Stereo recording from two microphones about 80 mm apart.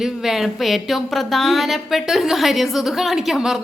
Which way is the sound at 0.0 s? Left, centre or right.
Centre.